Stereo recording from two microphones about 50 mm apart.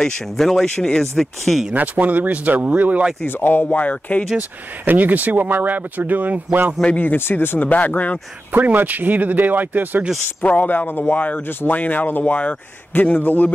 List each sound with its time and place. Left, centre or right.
0.0 s speech: centre
1.7 s speech: right
3.3 s speech: left
3.7 s a man's voice: left
4.4 s speech: right
7.0 s a man's voice: left
8.5 s speech: right
10.4 s a man's voice: left
11.1 s a man's voice: left